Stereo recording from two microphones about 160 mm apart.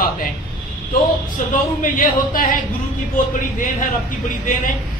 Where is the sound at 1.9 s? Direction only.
55° left (ahead or behind).